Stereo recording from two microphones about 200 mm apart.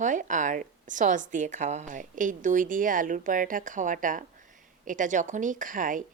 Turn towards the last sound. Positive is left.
turn(degrees=-40)  # may be behind; listen again after turning